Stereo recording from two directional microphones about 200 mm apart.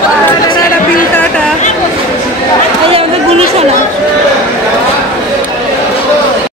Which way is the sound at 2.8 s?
30° right (ahead or behind).